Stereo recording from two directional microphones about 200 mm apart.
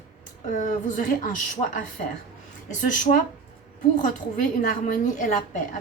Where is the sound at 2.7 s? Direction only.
40° left (ahead or behind).